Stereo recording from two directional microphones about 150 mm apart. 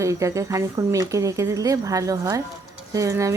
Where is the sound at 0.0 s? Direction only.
20° right (ahead or behind).